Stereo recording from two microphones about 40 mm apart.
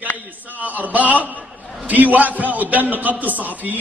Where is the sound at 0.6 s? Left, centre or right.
Right.